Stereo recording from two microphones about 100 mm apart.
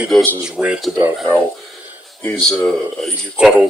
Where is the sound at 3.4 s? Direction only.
5° right (ahead or behind).